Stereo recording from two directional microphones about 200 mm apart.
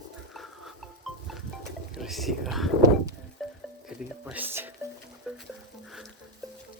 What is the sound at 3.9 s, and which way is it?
Frying, 5° right (ahead or behind).